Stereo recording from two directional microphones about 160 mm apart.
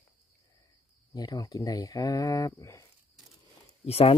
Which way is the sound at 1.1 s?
25° left (ahead or behind).